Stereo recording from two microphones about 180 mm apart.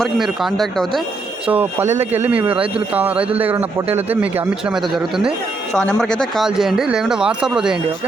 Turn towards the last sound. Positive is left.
turn(degrees=-5)  # may be behind; listen again after turning